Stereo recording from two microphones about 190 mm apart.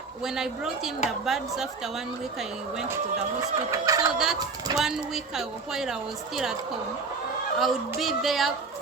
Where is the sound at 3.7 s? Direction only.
20° right (ahead or behind).